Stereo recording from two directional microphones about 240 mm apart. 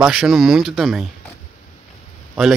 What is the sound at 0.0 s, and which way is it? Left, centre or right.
Speech, centre.